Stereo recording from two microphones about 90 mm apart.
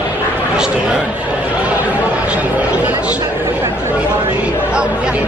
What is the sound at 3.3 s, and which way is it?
Chatter, 25° right (ahead or behind).